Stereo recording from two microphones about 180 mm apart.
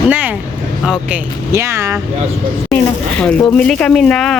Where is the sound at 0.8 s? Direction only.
5° right (ahead or behind).